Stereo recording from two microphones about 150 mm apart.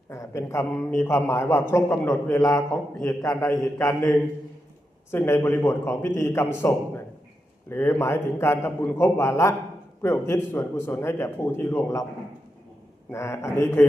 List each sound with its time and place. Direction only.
0.1 s a man's voice: 20° left (ahead or behind)
13.1 s a man's voice: 20° left (ahead or behind)